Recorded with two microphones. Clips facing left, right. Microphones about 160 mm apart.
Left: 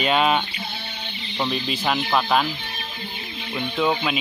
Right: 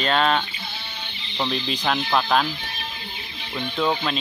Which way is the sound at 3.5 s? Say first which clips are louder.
Left 1 dB; 5° left (ahead or behind).